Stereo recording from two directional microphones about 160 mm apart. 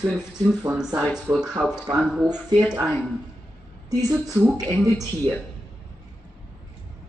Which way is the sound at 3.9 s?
25° right (ahead or behind).